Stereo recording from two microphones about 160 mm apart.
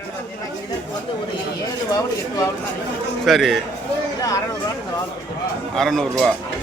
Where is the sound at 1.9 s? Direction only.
20° left (ahead or behind).